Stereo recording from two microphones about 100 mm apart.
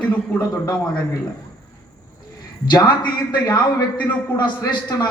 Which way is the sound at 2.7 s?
45° left (ahead or behind).